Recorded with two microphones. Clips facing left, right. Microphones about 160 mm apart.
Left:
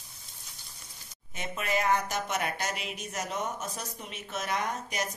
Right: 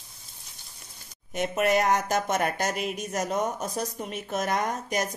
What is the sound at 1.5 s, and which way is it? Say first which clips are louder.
Speech: right 8 dB; 70° right (ahead or behind).